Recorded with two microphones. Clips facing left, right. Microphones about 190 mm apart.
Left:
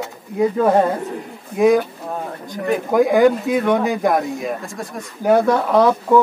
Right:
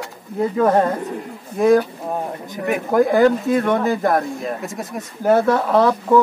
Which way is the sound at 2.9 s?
Centre (ahead or behind).